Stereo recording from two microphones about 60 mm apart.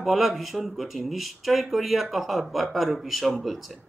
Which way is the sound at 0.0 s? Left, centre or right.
Centre.